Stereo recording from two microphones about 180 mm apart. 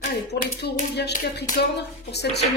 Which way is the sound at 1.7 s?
65° left (ahead or behind).